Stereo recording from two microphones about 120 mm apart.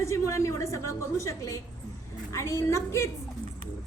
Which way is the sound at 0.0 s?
25° left (ahead or behind).